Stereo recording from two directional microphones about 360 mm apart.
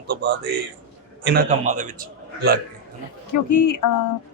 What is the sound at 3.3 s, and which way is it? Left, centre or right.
Speech, left.